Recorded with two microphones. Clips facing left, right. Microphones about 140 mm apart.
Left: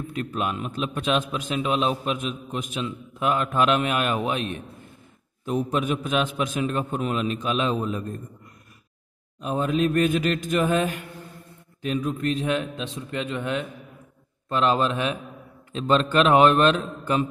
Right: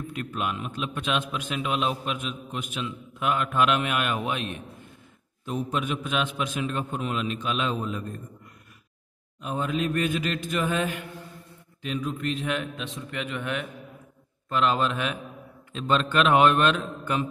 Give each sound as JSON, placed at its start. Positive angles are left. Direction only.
{"t": 0.1, "sound": "a man's voice", "side_deg": 35}
{"t": 5.5, "sound": "a man's voice", "side_deg": 45}
{"t": 9.4, "sound": "a man's voice", "side_deg": 40}